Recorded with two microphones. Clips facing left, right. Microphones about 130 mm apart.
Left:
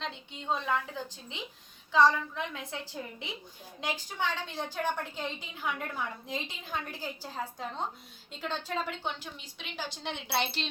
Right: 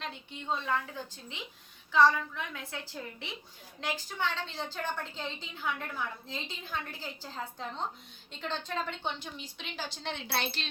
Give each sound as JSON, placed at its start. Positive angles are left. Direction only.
{"t": 0.0, "sound": "a woman's voice", "side_deg": 20}